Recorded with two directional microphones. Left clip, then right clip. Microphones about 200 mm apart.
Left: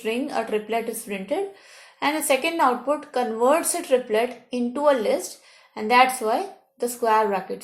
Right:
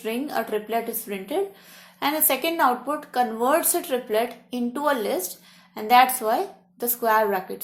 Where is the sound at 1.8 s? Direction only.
35° right (ahead or behind).